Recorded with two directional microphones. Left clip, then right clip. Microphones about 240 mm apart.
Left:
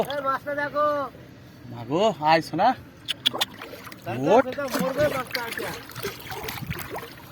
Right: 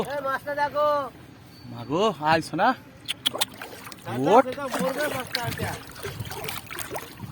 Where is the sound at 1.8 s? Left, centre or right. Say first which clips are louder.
Left 2 dB; centre.